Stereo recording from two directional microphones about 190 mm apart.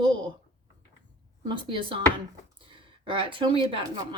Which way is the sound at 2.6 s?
25° right (ahead or behind).